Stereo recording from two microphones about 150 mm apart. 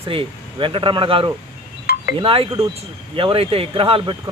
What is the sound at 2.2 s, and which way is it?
Speech, 40° right (ahead or behind).